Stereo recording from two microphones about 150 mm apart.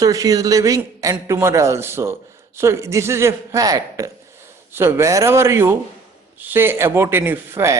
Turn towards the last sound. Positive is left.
turn(degrees=-15)  # may be behind; listen again after turning